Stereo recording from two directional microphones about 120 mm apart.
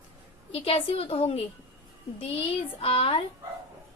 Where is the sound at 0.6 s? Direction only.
55° left (ahead or behind).